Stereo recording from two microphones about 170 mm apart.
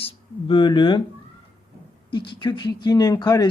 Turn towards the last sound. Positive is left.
turn(degrees=25)  # may be behind; listen again after turning